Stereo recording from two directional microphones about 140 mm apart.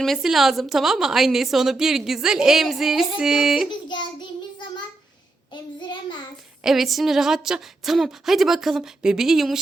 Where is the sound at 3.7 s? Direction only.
35° left (ahead or behind).